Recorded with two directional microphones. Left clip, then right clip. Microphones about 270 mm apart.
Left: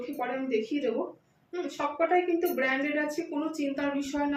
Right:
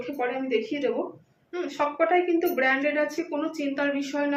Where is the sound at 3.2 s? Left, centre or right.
Centre.